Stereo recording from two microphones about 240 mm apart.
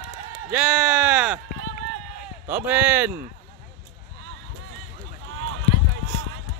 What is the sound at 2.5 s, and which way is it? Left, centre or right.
Speech, centre.